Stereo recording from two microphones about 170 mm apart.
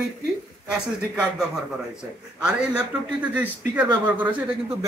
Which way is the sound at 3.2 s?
10° right (ahead or behind).